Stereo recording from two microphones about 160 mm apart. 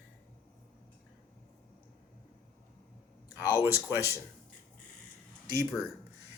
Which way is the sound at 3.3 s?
20° left (ahead or behind).